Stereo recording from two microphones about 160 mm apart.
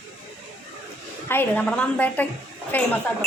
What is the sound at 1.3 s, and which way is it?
A woman's voice, 10° left (ahead or behind).